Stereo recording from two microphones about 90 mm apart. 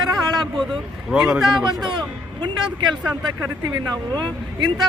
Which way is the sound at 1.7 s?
50° right (ahead or behind).